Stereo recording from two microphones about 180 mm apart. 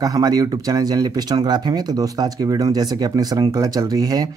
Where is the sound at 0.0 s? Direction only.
20° right (ahead or behind).